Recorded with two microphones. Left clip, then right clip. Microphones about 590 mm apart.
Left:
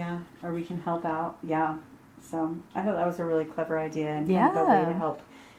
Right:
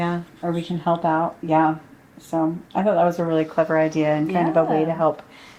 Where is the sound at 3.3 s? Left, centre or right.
Right.